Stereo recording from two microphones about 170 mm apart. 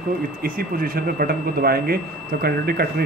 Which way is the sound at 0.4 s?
60° right (ahead or behind).